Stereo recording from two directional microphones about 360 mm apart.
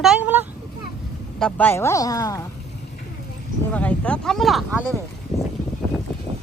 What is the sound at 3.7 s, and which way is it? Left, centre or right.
Speech, centre.